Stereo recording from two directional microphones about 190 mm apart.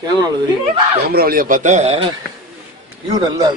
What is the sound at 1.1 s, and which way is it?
Speech, 50° right (ahead or behind).